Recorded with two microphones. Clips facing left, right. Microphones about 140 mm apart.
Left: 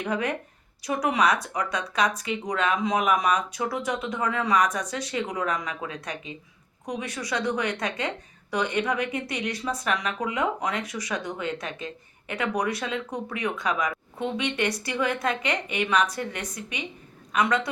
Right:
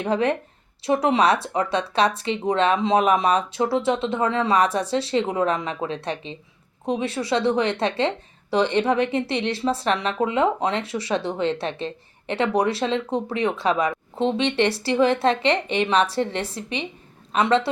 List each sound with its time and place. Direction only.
0.0 s a woman's voice: 30° right (ahead or behind)